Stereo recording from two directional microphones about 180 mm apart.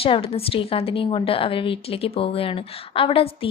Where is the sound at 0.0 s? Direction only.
30° left (ahead or behind).